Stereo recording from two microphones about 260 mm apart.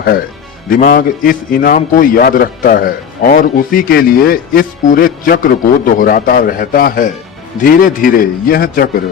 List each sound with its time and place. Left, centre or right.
0.7 s a man's voice: left